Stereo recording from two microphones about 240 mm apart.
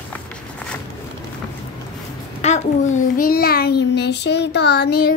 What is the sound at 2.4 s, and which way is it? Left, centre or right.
A child's voice, left.